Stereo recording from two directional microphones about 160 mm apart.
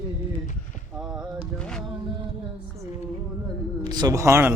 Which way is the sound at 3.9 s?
25° right (ahead or behind).